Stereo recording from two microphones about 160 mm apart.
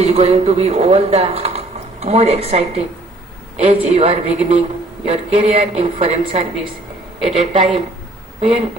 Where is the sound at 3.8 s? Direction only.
40° right (ahead or behind).